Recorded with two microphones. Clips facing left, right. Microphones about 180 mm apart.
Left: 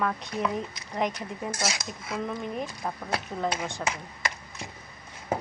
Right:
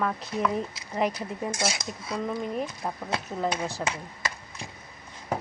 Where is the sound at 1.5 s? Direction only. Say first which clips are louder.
Right 1 dB; 25° right (ahead or behind).